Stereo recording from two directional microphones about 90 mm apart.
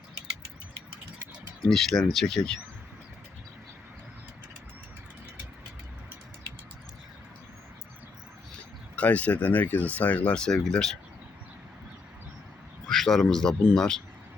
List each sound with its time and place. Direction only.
1.6 s speech: 5° left (ahead or behind)
9.0 s speech: 15° left (ahead or behind)
12.9 s speech: centre (ahead or behind)